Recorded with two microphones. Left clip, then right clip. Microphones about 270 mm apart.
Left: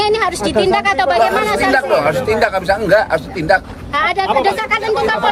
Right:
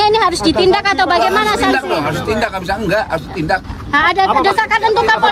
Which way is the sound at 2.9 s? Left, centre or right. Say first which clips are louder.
Left 3 dB; centre.